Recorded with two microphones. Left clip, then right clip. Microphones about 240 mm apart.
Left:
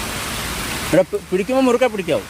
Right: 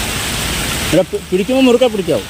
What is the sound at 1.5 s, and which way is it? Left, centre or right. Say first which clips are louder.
Speech: right 5 dB; left.